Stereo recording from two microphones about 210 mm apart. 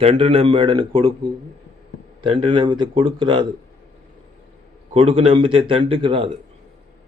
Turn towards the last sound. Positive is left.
turn(degrees=-25)  # may be behind; listen again after turning